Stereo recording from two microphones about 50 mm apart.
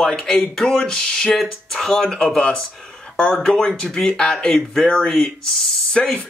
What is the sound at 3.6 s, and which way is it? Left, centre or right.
Speech, centre.